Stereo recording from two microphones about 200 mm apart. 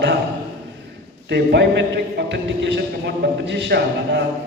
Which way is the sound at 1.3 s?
60° right (ahead or behind).